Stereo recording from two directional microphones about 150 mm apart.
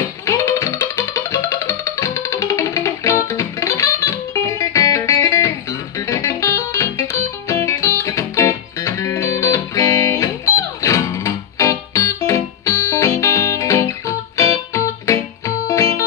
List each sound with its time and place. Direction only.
0.3 s music: 20° left (ahead or behind)